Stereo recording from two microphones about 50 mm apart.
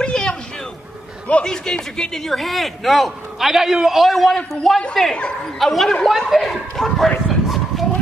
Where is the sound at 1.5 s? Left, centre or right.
Centre.